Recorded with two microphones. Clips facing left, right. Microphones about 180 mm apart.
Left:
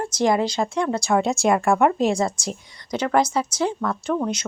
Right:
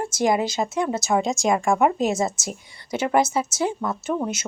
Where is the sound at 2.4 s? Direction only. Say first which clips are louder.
Left 2 dB; 5° right (ahead or behind).